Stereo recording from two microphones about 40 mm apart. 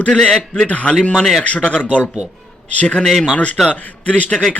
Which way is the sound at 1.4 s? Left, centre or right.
Left.